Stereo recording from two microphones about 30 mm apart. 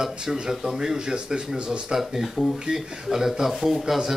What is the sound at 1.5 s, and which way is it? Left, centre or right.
Speech, right.